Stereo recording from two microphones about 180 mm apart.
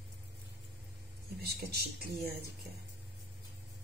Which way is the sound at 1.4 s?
65° right (ahead or behind).